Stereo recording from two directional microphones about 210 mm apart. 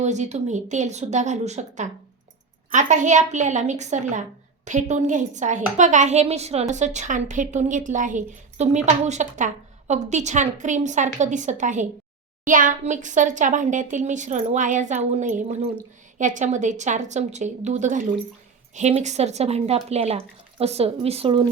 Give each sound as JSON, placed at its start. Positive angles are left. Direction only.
{"t": 0.0, "sound": "a woman's voice", "side_deg": -35}